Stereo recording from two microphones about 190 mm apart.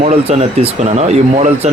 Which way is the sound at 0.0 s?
35° right (ahead or behind).